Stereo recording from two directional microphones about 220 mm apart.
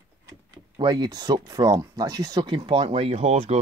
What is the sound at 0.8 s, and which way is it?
Speech, 20° right (ahead or behind).